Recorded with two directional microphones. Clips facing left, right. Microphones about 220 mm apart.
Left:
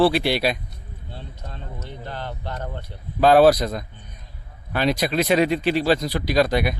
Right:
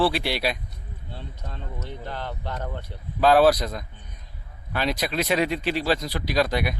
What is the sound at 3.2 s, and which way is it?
Speech, 50° left (ahead or behind).